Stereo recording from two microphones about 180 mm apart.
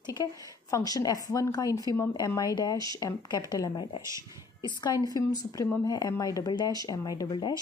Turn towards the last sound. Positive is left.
turn(degrees=20)  # may be behind; listen again after turning